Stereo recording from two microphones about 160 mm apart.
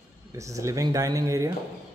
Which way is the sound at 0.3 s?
20° right (ahead or behind).